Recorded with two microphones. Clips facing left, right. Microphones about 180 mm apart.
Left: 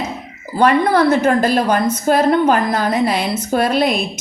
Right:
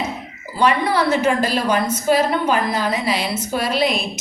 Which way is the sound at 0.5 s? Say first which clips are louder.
Left 5 dB; 50° left (ahead or behind).